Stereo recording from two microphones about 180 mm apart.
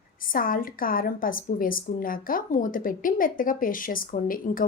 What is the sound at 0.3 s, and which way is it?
A woman's voice, 50° left (ahead or behind).